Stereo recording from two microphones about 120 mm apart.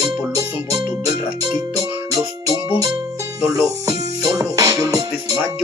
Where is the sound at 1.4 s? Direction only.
30° right (ahead or behind).